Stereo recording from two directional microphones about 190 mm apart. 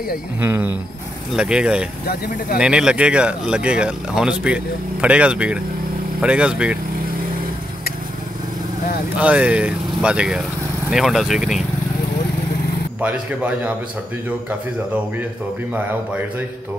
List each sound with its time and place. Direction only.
0.4 s speech: 10° right (ahead or behind)
2.0 s speech: 50° left (ahead or behind)
2.6 s speech: 5° right (ahead or behind)
9.1 s speech: 5° right (ahead or behind)
13.0 s speech: 10° right (ahead or behind)